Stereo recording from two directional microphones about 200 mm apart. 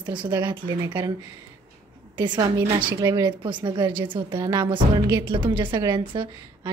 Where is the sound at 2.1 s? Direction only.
20° right (ahead or behind).